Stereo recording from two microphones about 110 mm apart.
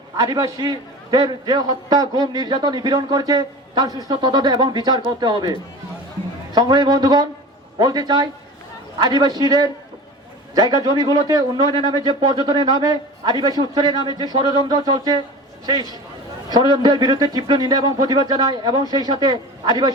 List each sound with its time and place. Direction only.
0.2 s a man's voice: 30° right (ahead or behind)